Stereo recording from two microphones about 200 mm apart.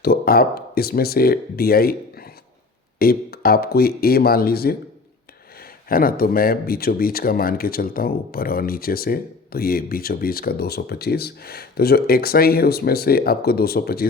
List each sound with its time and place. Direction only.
0.0 s speech: 50° left (ahead or behind)
5.9 s speech: 45° left (ahead or behind)